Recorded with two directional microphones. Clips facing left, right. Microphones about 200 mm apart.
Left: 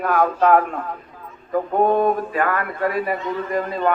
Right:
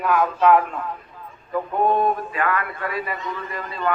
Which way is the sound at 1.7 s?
45° left (ahead or behind).